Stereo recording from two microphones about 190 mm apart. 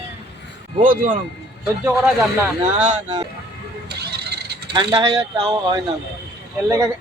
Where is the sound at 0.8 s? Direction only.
45° right (ahead or behind).